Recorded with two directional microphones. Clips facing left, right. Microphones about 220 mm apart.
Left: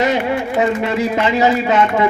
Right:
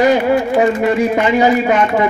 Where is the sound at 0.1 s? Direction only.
30° right (ahead or behind).